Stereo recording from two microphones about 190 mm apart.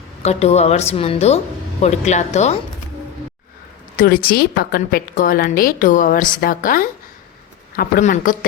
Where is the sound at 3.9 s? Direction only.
50° left (ahead or behind).